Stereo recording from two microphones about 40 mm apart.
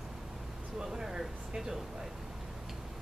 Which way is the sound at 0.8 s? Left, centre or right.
Centre.